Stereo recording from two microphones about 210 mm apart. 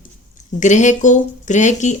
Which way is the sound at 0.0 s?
35° left (ahead or behind).